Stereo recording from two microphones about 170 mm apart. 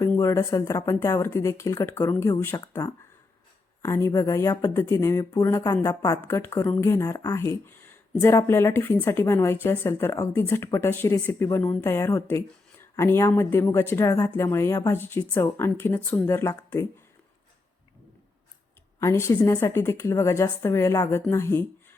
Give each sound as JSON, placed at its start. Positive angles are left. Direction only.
{"t": 0.0, "sound": "a woman's voice", "side_deg": 15}
{"t": 18.9, "sound": "a woman's voice", "side_deg": 15}